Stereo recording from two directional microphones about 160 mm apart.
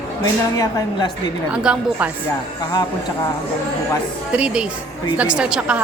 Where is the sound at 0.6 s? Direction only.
20° left (ahead or behind).